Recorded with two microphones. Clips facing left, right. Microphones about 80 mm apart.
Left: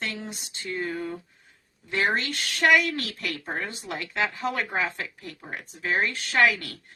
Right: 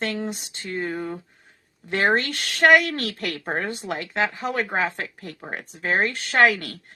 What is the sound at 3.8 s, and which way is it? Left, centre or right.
A woman's voice, right.